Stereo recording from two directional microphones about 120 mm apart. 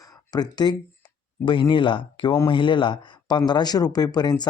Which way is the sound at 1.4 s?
45° left (ahead or behind).